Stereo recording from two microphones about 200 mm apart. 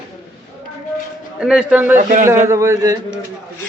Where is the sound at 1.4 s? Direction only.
5° right (ahead or behind).